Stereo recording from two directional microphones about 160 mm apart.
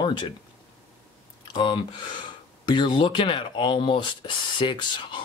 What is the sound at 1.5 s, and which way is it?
Speech, 30° left (ahead or behind).